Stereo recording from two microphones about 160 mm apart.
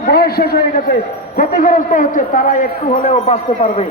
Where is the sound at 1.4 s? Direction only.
55° left (ahead or behind).